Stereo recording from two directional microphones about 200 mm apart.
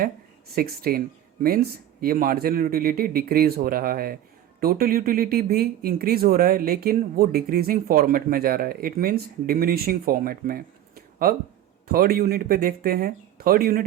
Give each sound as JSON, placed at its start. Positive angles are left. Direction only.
{"t": 0.5, "sound": "speech", "side_deg": -50}